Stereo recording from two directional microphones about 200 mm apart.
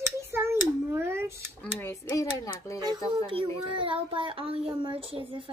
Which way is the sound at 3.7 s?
25° right (ahead or behind).